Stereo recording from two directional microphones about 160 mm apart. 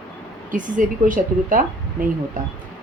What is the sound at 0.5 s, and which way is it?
Speech, 55° right (ahead or behind).